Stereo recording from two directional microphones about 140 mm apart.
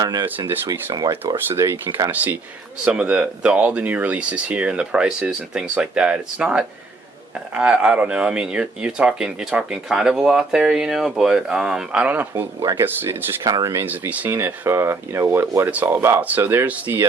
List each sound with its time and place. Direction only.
0.0 s speech: 25° right (ahead or behind)
0.3 s speech: 15° right (ahead or behind)
2.0 s speech: 15° right (ahead or behind)
12.3 s speech: 20° right (ahead or behind)
13.8 s speech: 10° right (ahead or behind)